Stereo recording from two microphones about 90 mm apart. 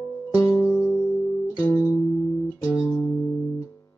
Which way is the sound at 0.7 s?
25° left (ahead or behind).